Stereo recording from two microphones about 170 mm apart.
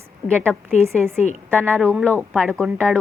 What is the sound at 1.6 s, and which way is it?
Speech, 15° right (ahead or behind).